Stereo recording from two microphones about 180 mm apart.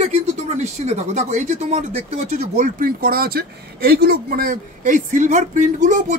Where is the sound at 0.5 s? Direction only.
40° right (ahead or behind).